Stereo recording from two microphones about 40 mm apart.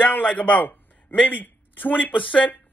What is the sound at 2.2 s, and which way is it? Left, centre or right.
Speech, left.